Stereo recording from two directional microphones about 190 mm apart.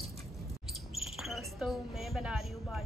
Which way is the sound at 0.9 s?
Centre (ahead or behind).